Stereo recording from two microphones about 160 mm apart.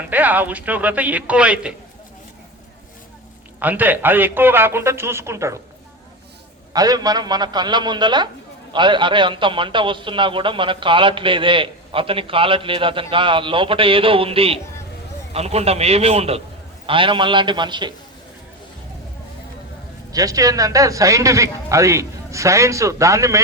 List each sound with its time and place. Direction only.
0.1 s a man's voice: 10° right (ahead or behind)
3.6 s a man's voice: 10° right (ahead or behind)
6.7 s a man's voice: 25° right (ahead or behind)
20.1 s a man's voice: 20° right (ahead or behind)